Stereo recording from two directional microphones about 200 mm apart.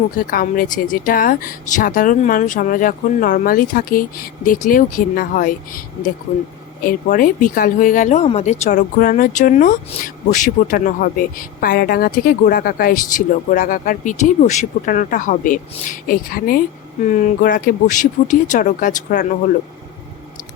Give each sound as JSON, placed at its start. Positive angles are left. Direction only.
{"t": 0.2, "sound": "speech", "side_deg": 45}
{"t": 6.8, "sound": "speech", "side_deg": 45}